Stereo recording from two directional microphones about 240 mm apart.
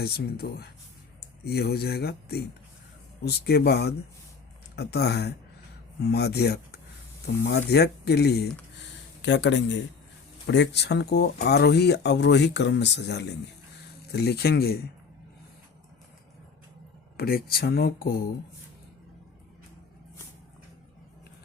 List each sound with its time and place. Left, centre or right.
0.0 s speech: left
8.8 s a sound: left
10.4 s speech: left
17.2 s speech: left